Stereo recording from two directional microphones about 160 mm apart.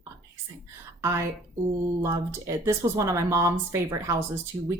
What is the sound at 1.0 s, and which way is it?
A woman's voice, 15° right (ahead or behind).